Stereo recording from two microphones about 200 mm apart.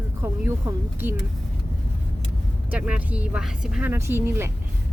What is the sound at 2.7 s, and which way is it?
Speech, 5° right (ahead or behind).